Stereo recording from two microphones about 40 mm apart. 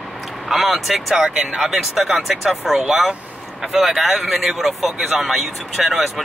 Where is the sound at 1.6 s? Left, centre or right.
Centre.